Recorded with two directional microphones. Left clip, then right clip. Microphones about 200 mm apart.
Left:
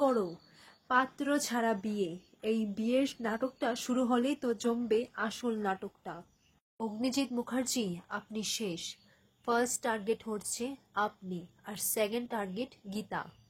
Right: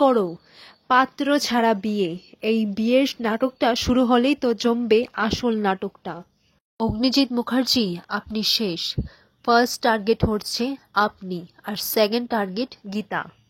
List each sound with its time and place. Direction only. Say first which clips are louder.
0.0 s a woman's voice: right 11 dB; 45° right (ahead or behind)
12.9 s speech: right 11 dB; 30° right (ahead or behind)